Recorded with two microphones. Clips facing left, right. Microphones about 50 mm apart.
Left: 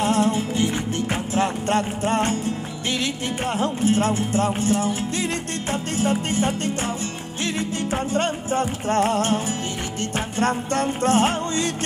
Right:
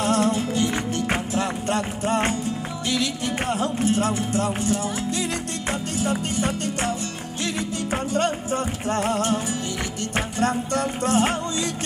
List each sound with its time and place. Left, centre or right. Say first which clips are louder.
0.0 s music: left 1 dB; left
1.3 s music: left 3 dB; left
8.1 s music: right 1 dB; left
10.4 s music: left 2 dB; left